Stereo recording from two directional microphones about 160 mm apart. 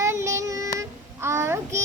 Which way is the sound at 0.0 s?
20° right (ahead or behind).